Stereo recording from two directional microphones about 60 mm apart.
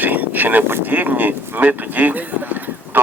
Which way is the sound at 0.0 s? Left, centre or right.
Right.